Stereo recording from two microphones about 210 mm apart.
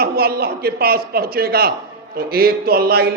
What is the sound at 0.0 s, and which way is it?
A man's voice, 45° right (ahead or behind).